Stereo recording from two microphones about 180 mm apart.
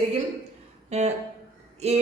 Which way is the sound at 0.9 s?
40° right (ahead or behind).